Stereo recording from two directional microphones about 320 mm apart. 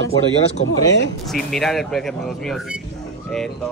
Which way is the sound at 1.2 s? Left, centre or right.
Centre.